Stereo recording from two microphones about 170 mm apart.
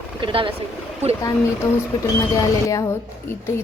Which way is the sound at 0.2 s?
30° right (ahead or behind).